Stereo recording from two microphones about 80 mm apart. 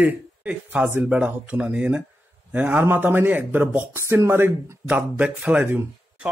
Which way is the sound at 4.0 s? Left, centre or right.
Right.